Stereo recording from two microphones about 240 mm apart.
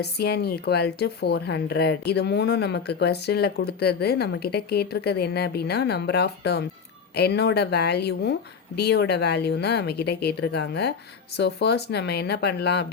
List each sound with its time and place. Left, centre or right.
0.0 s speech: left